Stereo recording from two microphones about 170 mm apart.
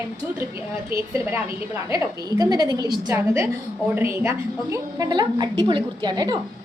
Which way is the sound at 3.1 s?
15° right (ahead or behind).